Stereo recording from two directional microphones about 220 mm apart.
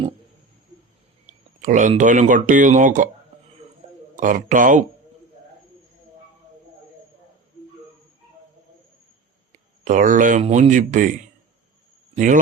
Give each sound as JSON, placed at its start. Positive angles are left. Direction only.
{"t": 1.3, "sound": "speech", "side_deg": -35}
{"t": 4.2, "sound": "speech", "side_deg": -35}
{"t": 9.8, "sound": "speech", "side_deg": -35}
{"t": 12.1, "sound": "a man's voice", "side_deg": -35}